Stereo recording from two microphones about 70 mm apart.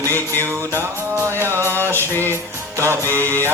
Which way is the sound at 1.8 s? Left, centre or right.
Left.